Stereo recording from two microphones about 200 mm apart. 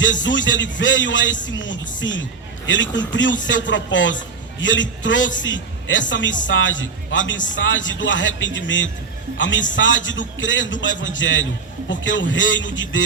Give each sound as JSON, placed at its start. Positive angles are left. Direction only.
{"t": 0.0, "sound": "a man's voice", "side_deg": 70}